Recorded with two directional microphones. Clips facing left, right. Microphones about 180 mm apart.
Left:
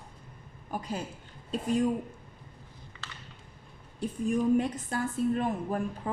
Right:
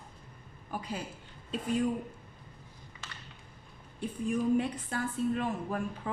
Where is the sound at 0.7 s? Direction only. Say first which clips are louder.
Left 3 dB; 45° left (ahead or behind).